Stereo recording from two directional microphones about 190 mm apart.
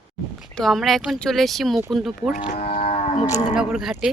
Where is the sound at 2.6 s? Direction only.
30° left (ahead or behind).